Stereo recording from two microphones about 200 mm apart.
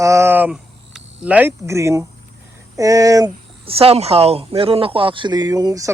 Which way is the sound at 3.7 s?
30° right (ahead or behind).